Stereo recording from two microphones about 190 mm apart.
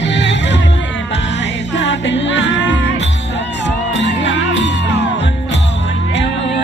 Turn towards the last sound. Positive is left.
turn(degrees=70)  # may be behind; listen again after turning